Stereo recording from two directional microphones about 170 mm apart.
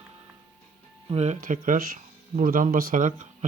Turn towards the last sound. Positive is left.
turn(degrees=-50)  # may be behind; listen again after turning